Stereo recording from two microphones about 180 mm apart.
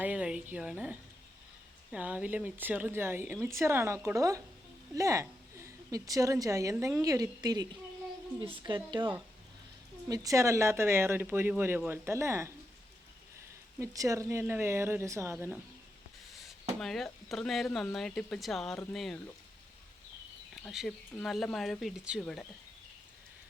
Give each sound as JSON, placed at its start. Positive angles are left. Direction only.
{"t": 0.0, "sound": "a sound", "side_deg": -5}
{"t": 0.5, "sound": "a woman's voice", "side_deg": -5}
{"t": 13.7, "sound": "speech", "side_deg": -15}
{"t": 16.8, "sound": "speech", "side_deg": 0}
{"t": 20.7, "sound": "speech", "side_deg": 0}